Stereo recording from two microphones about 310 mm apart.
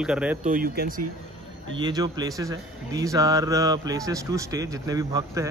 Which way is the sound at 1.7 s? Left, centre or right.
Centre.